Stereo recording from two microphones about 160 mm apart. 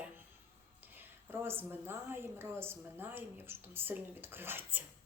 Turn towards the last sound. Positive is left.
turn(degrees=-10)  # may be behind; listen again after turning